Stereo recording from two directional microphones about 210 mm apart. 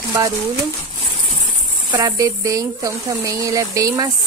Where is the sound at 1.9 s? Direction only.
15° right (ahead or behind).